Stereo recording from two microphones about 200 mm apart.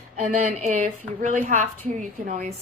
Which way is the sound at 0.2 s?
35° right (ahead or behind).